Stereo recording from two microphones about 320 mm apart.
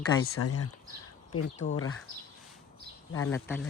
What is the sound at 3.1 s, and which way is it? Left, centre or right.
Speech, centre.